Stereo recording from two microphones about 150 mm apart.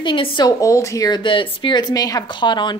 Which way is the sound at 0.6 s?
20° left (ahead or behind).